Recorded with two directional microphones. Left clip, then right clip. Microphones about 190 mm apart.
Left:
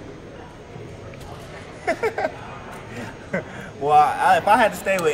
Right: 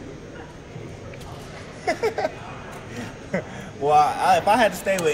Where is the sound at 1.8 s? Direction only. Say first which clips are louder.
Left 1 dB; 5° left (ahead or behind).